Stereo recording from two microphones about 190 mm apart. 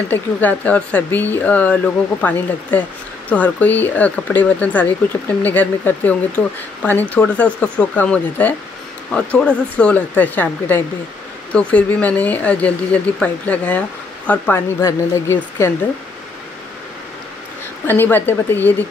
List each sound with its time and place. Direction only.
0.1 s speech: 10° left (ahead or behind)
17.8 s speech: 10° left (ahead or behind)